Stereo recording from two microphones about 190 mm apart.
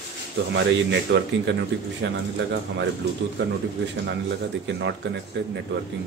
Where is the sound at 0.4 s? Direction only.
70° right (ahead or behind).